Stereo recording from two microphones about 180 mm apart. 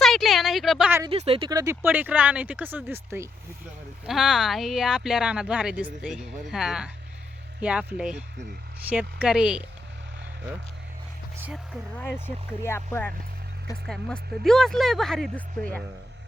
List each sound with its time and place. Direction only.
0.0 s a sound: centre (ahead or behind)
1.1 s speech: 35° right (ahead or behind)
1.5 s speech: 20° right (ahead or behind)
4.0 s speech: 5° right (ahead or behind)
11.4 s speech: 5° right (ahead or behind)
12.6 s speech: 15° left (ahead or behind)